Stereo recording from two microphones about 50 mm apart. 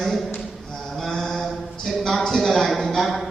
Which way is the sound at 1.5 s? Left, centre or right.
Centre.